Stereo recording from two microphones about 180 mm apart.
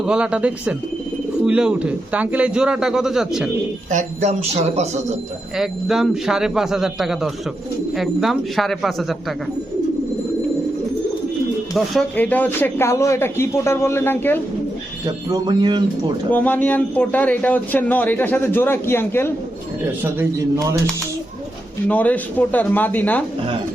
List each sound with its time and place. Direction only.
0.0 s a man's voice: 5° right (ahead or behind)
3.9 s speech: 40° right (ahead or behind)
5.5 s a man's voice: centre (ahead or behind)
11.9 s a man's voice: 10° left (ahead or behind)
15.0 s speech: 20° right (ahead or behind)
16.3 s a man's voice: 10° left (ahead or behind)
20.1 s speech: 15° right (ahead or behind)
21.8 s a man's voice: 10° left (ahead or behind)